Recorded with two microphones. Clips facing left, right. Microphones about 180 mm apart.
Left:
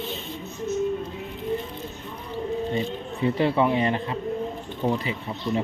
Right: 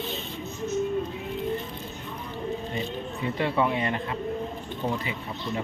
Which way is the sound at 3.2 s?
25° left (ahead or behind).